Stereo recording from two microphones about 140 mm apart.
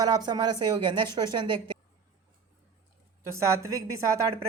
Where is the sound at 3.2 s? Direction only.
20° right (ahead or behind).